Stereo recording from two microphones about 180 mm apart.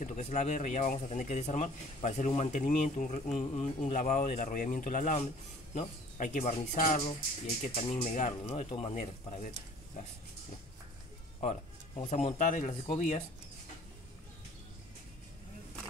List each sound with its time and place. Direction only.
0.0 s speech: 40° left (ahead or behind)
11.9 s speech: 35° left (ahead or behind)